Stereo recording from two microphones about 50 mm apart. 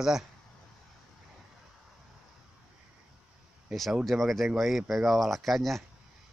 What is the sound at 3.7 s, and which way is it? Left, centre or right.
Speech, centre.